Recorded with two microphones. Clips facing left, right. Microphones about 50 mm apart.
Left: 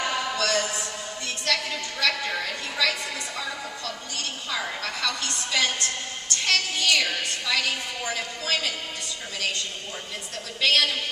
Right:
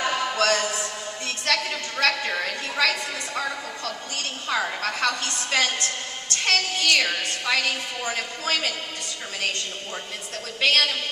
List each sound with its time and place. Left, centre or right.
0.4 s a sound: right
2.8 s a woman's voice: right
10.6 s a woman's voice: right